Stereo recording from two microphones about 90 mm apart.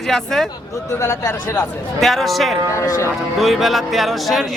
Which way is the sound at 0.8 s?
35° left (ahead or behind).